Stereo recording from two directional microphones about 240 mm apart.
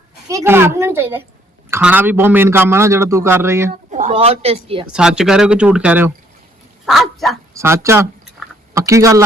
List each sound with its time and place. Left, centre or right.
0.3 s a man's voice: centre
3.9 s speech: right
4.9 s speech: centre
7.5 s a man's voice: centre